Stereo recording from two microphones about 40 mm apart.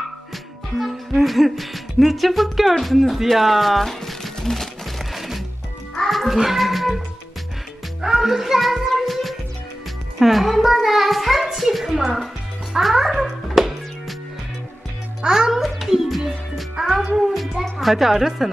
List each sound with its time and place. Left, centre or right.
0.7 s speech: centre
5.1 s music: centre
8.0 s music: centre
10.1 s a child's voice: centre
13.6 s music: centre
15.2 s a woman's voice: centre
16.7 s a woman's voice: centre